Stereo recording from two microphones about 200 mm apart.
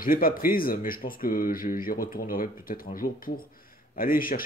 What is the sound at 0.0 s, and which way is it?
Speech, 45° left (ahead or behind).